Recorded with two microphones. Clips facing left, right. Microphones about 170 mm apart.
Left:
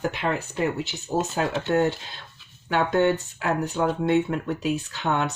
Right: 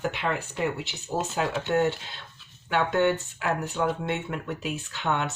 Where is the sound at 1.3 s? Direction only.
40° left (ahead or behind).